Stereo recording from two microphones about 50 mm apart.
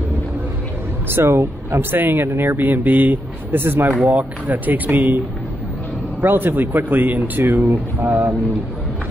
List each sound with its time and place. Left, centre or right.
1.0 s speech: right
4.0 s speech: right
6.2 s speech: right